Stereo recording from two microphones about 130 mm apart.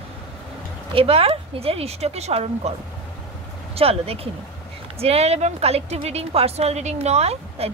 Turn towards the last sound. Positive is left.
turn(degrees=-55)  # may be behind; listen again after turning